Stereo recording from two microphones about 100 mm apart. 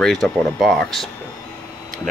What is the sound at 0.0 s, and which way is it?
Speech, 5° left (ahead or behind).